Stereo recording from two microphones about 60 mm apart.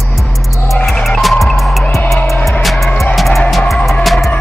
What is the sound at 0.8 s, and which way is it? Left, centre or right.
Music, centre.